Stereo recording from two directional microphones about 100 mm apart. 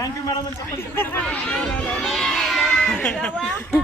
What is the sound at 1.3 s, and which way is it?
Speech, 10° left (ahead or behind).